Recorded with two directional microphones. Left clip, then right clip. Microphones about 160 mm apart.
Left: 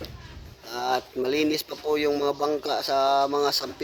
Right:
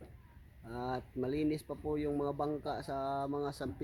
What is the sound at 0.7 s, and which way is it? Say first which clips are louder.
Speech: left 13 dB; 5° right (ahead or behind).